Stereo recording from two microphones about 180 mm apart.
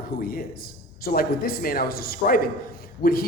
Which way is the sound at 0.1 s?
55° left (ahead or behind).